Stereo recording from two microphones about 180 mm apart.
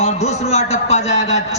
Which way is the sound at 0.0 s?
40° left (ahead or behind).